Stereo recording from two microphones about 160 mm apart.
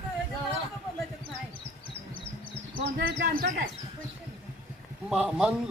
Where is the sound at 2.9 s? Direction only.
65° right (ahead or behind).